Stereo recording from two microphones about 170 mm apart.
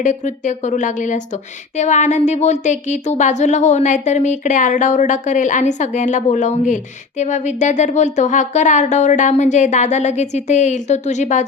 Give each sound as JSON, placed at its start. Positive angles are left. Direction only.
{"t": 0.0, "sound": "speech", "side_deg": 45}